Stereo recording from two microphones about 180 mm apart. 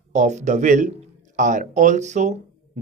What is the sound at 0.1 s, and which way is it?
Speech, 40° right (ahead or behind).